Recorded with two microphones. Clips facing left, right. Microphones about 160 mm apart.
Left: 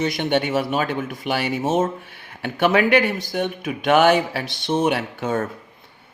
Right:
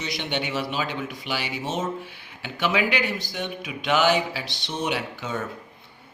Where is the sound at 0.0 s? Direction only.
50° left (ahead or behind).